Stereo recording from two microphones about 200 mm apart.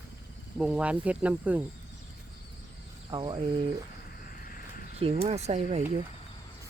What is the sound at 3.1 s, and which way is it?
Cricket, 20° right (ahead or behind).